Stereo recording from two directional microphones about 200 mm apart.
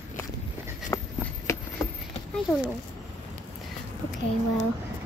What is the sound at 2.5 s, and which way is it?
Speech, centre (ahead or behind).